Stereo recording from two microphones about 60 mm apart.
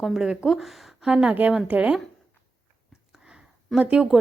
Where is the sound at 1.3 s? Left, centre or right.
Right.